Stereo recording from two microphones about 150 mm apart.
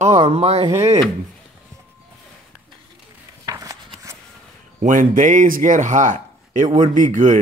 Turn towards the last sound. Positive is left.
turn(degrees=-60)  # may be behind; listen again after turning